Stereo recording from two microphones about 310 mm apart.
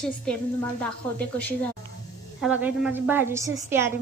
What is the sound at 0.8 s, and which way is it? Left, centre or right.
A woman's voice, centre.